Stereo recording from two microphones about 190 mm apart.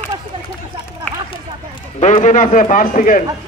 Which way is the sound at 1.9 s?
40° left (ahead or behind).